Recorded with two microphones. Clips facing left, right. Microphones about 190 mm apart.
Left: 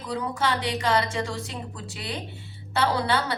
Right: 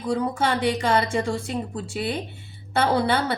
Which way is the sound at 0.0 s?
50° right (ahead or behind).